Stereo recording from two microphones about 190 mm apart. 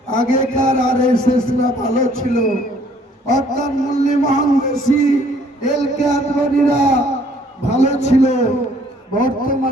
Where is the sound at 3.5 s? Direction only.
40° left (ahead or behind).